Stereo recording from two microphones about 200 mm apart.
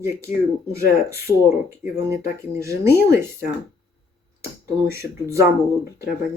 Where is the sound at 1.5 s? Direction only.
15° right (ahead or behind).